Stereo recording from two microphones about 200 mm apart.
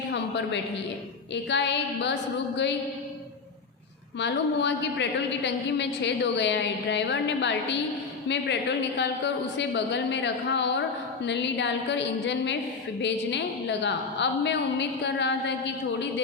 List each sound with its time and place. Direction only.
0.1 s a sound: 60° left (ahead or behind)
1.3 s a woman's voice: 60° left (ahead or behind)
4.2 s a woman's voice: 60° left (ahead or behind)
9.0 s a woman's voice: 60° left (ahead or behind)